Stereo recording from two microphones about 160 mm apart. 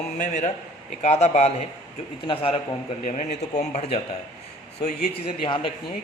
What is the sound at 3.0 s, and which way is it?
Speech, 45° left (ahead or behind).